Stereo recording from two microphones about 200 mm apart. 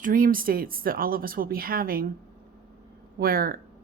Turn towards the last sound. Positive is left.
turn(degrees=-45)  # may be behind; listen again after turning